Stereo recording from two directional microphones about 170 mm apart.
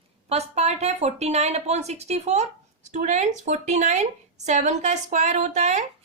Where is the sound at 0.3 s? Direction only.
40° right (ahead or behind).